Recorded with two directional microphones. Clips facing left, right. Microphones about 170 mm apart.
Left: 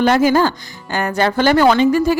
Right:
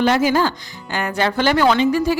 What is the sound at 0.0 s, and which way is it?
Speech, 50° left (ahead or behind).